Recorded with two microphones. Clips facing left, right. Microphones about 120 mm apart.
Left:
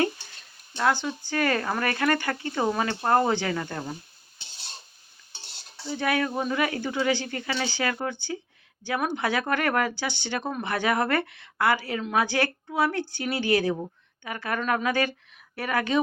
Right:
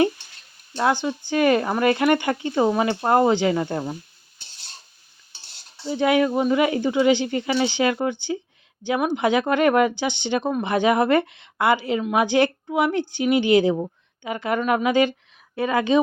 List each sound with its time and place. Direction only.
0.8 s speech: 20° right (ahead or behind)
5.9 s speech: 20° right (ahead or behind)